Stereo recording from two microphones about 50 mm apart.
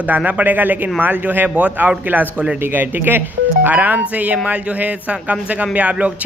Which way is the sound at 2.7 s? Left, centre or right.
Right.